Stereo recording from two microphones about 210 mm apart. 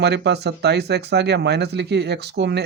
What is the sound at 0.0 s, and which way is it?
Speech, 55° right (ahead or behind).